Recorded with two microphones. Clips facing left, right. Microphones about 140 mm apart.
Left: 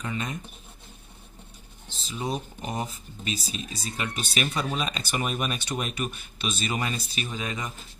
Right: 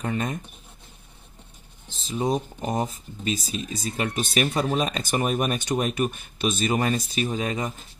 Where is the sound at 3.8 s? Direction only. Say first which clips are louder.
Right 6 dB; 45° right (ahead or behind).